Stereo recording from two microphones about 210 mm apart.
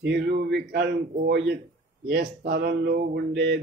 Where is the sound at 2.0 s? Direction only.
50° right (ahead or behind).